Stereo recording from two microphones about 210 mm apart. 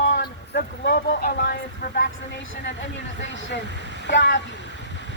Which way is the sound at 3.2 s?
60° left (ahead or behind).